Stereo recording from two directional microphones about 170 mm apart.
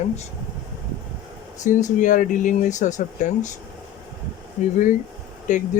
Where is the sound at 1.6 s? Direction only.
45° left (ahead or behind).